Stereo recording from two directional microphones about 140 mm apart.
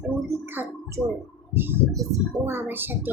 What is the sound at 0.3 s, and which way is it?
Speech, 15° right (ahead or behind).